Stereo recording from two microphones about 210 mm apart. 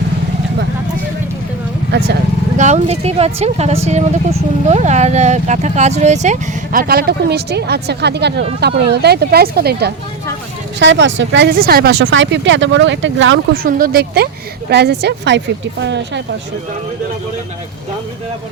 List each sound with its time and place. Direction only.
1.9 s speech: 50° right (ahead or behind)
2.6 s speech: 30° right (ahead or behind)
10.8 s speech: 60° right (ahead or behind)
13.5 s speech: 45° right (ahead or behind)